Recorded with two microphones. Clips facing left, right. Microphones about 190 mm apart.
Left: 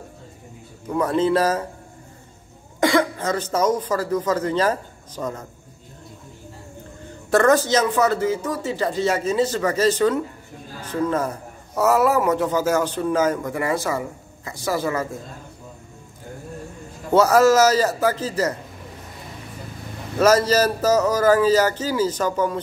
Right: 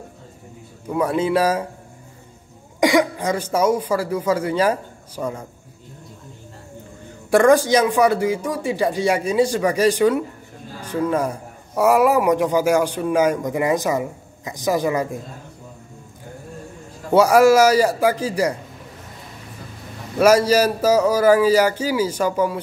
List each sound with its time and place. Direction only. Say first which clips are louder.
0.8 s a man's voice: even; 10° right (ahead or behind)
2.8 s speech: right 2 dB; 15° right (ahead or behind)
7.2 s a man's voice: right 3 dB; 10° right (ahead or behind)
17.1 s a man's voice: right 2 dB; 10° right (ahead or behind)
20.2 s a man's voice: right 2 dB; 10° right (ahead or behind)